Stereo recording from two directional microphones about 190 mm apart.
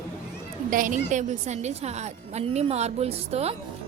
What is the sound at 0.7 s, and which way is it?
A woman's voice, 45° right (ahead or behind).